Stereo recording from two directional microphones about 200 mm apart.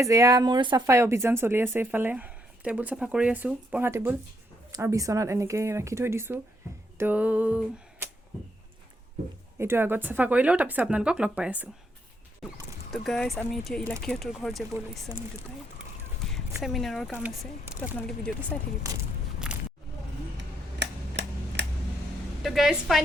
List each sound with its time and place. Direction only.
0.0 s speech: 15° right (ahead or behind)
9.6 s speech: 10° right (ahead or behind)
12.9 s speech: centre (ahead or behind)
16.6 s speech: centre (ahead or behind)
18.5 s speech: 10° left (ahead or behind)
19.5 s a sound: 5° right (ahead or behind)
20.7 s a sound: 60° right (ahead or behind)
22.4 s speech: centre (ahead or behind)